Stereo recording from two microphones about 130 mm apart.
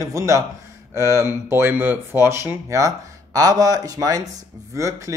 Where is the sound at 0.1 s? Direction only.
25° right (ahead or behind).